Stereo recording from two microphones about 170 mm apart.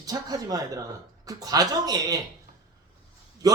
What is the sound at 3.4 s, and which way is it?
Speech, 20° right (ahead or behind).